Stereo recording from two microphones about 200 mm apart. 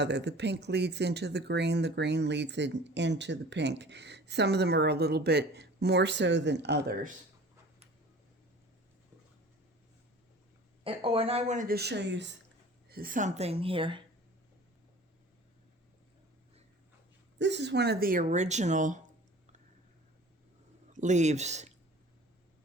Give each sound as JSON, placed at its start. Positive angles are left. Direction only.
{"t": 0.0, "sound": "speech", "side_deg": -60}
{"t": 10.8, "sound": "speech", "side_deg": -25}
{"t": 11.7, "sound": "speech", "side_deg": -55}
{"t": 12.9, "sound": "speech", "side_deg": -45}
{"t": 17.3, "sound": "speech", "side_deg": -60}
{"t": 20.9, "sound": "speech", "side_deg": -35}